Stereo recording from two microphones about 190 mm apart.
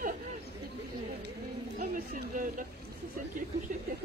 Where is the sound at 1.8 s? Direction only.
50° right (ahead or behind).